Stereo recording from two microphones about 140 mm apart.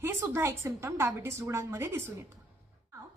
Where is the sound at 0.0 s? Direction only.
20° right (ahead or behind).